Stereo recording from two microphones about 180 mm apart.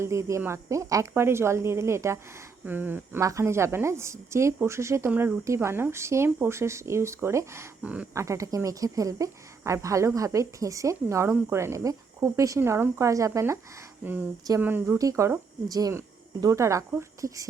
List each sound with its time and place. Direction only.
0.0 s a woman's voice: 15° right (ahead or behind)